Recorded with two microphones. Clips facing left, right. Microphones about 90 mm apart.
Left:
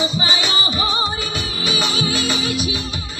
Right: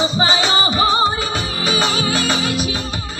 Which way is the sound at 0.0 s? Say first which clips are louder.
Right 4 dB; 30° right (ahead or behind).